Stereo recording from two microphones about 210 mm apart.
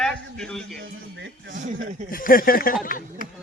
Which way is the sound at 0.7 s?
60° right (ahead or behind).